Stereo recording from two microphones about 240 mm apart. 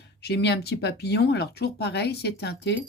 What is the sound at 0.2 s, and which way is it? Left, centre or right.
Speech, left.